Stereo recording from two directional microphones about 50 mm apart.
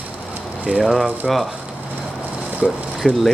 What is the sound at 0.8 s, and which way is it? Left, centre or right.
Speech, centre.